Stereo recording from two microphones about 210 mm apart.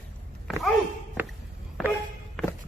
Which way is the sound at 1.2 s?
10° right (ahead or behind).